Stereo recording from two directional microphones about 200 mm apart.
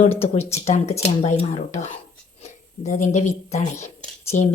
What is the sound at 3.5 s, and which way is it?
Speech, 35° left (ahead or behind).